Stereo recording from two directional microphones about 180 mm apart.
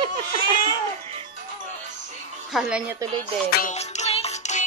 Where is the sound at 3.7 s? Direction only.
35° left (ahead or behind).